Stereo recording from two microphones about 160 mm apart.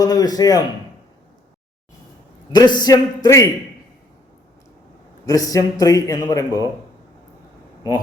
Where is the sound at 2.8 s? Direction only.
25° left (ahead or behind).